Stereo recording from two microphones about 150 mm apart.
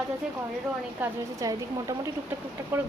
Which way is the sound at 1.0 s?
15° right (ahead or behind).